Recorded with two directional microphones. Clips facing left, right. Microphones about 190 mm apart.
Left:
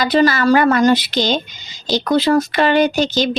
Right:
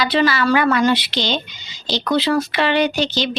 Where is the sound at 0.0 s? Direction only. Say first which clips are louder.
Left 3 dB; 45° left (ahead or behind).